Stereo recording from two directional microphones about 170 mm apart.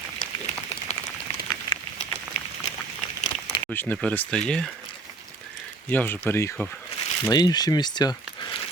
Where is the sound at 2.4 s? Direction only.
40° left (ahead or behind).